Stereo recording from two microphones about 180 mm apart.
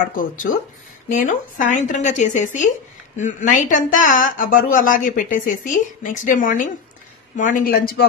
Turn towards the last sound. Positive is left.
turn(degrees=55)  # may be behind; listen again after turning